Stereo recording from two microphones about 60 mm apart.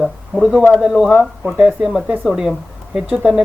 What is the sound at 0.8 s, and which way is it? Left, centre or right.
A woman's voice, centre.